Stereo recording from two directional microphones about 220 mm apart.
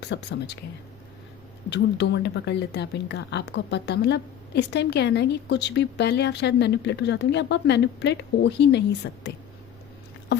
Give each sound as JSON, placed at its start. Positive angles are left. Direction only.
{"t": 0.0, "sound": "speech", "side_deg": 50}
{"t": 1.7, "sound": "speech", "side_deg": 50}